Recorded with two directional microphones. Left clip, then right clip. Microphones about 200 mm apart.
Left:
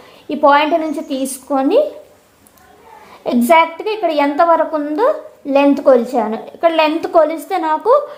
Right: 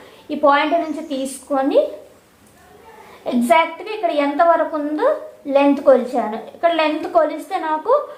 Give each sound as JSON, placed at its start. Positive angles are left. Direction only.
{"t": 0.3, "sound": "a woman's voice", "side_deg": 50}
{"t": 3.2, "sound": "a woman's voice", "side_deg": 50}